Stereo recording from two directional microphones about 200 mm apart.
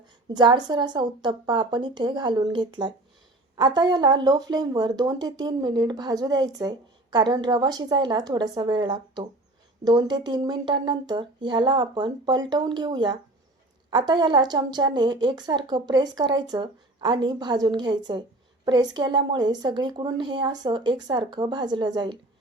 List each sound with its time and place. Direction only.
0.3 s speech: 20° right (ahead or behind)